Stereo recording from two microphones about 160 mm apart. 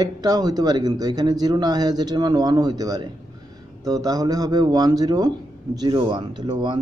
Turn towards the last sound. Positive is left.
turn(degrees=-25)  # may be behind; listen again after turning